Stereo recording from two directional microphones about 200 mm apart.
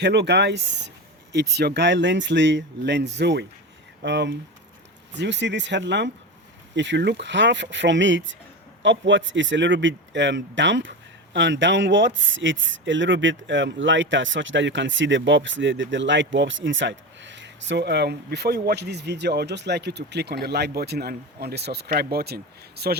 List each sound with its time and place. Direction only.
0.0 s speech: 60° right (ahead or behind)